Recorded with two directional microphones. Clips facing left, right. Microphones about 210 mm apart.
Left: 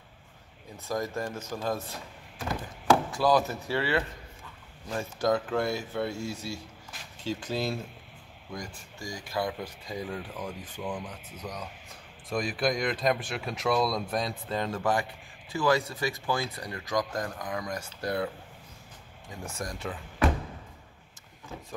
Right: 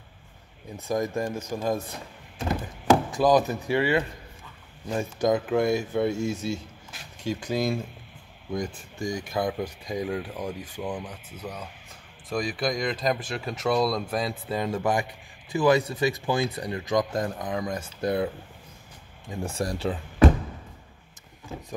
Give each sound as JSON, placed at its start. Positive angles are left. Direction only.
{"t": 0.8, "sound": "speech", "side_deg": -20}
{"t": 2.3, "sound": "a sound", "side_deg": -20}
{"t": 4.8, "sound": "speech", "side_deg": -15}
{"t": 19.4, "sound": "speech", "side_deg": -30}